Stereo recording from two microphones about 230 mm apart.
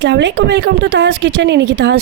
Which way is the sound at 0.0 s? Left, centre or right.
Right.